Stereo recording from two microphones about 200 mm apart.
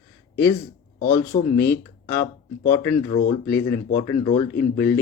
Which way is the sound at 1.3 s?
35° left (ahead or behind).